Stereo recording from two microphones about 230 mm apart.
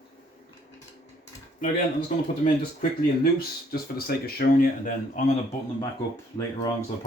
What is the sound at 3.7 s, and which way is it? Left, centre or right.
Speech, left.